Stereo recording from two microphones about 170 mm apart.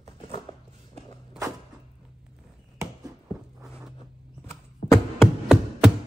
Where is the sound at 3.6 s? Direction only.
5° right (ahead or behind).